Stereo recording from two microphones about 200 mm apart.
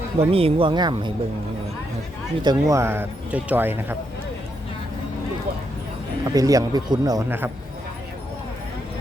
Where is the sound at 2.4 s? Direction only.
20° right (ahead or behind).